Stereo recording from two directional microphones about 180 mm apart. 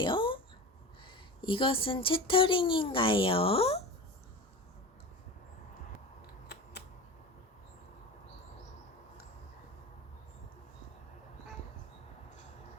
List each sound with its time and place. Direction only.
0.0 s speech: 25° left (ahead or behind)